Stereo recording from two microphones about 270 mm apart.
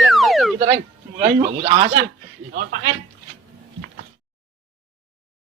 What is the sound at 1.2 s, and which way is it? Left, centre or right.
Speech, right.